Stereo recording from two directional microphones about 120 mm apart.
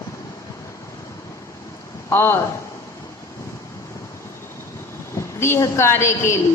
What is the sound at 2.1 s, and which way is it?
Speech, 20° left (ahead or behind).